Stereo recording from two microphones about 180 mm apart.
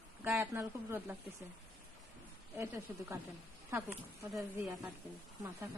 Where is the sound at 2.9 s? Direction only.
15° right (ahead or behind).